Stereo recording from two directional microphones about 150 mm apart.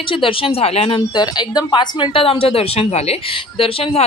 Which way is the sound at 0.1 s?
35° left (ahead or behind).